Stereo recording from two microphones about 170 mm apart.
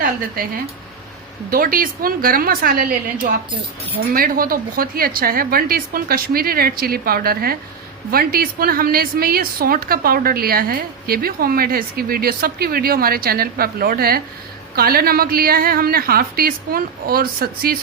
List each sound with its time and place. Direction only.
1.5 s a woman's voice: 55° right (ahead or behind)
4.1 s a woman's voice: 55° right (ahead or behind)